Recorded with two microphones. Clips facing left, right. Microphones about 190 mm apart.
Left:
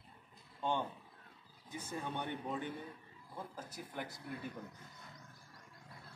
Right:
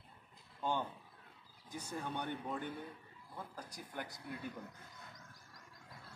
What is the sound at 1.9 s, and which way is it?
A man's voice, centre (ahead or behind).